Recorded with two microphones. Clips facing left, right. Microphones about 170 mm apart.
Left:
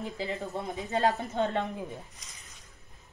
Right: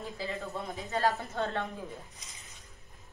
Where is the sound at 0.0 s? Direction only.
20° left (ahead or behind).